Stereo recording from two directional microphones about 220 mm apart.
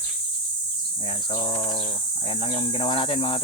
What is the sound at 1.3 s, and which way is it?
Speech, 25° left (ahead or behind).